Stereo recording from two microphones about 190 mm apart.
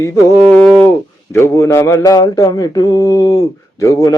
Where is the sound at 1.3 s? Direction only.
15° left (ahead or behind).